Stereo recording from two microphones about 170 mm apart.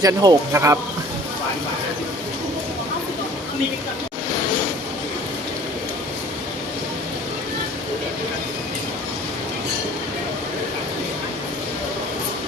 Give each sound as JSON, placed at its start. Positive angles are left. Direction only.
{"t": 0.0, "sound": "speech", "side_deg": -20}